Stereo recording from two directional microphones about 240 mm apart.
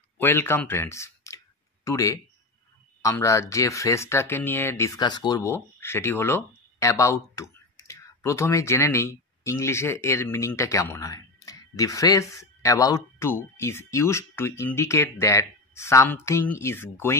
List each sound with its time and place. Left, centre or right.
0.2 s speech: centre